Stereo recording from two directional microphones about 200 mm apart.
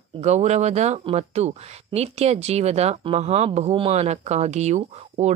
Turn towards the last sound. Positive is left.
turn(degrees=-35)  # may be behind; listen again after turning